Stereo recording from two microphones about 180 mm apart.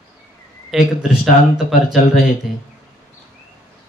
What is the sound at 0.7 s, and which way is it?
Speech, centre (ahead or behind).